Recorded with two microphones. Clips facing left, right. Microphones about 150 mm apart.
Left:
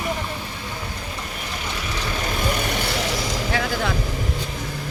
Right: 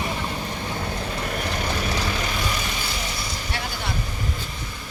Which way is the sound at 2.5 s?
60° left (ahead or behind).